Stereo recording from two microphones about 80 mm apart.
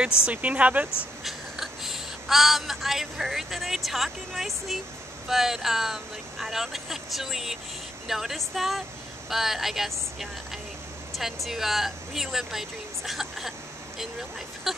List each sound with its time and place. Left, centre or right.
0.3 s speech: centre
1.2 s speech: centre
14.7 s speech: centre